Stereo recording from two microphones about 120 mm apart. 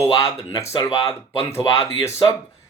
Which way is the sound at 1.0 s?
55° left (ahead or behind).